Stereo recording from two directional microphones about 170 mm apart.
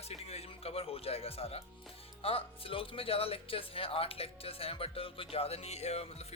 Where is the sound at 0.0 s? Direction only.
35° left (ahead or behind).